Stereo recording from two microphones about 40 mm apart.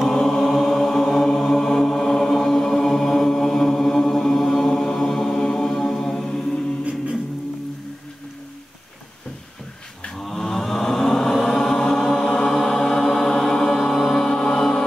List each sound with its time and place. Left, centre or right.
0.0 s mantra: centre
6.8 s music: right
10.1 s chant: centre